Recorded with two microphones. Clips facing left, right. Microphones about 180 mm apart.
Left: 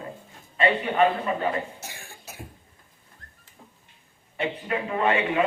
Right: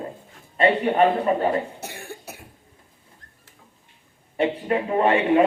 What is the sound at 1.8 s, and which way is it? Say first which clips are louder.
Cough: right 7 dB; 60° right (ahead or behind).